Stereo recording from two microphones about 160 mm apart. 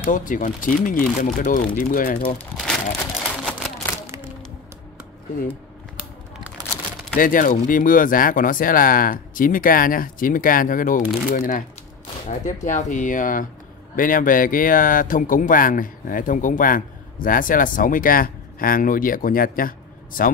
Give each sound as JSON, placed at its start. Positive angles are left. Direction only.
{"t": 0.0, "sound": "speech", "side_deg": 55}
{"t": 2.5, "sound": "crumpling", "side_deg": 5}
{"t": 3.4, "sound": "a sound", "side_deg": 5}
{"t": 7.2, "sound": "speech", "side_deg": 60}